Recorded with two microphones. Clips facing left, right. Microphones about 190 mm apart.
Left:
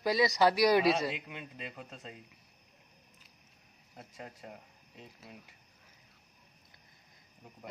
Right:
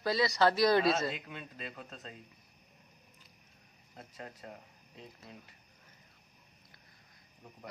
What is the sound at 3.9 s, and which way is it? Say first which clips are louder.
Speech: even; 5° left (ahead or behind).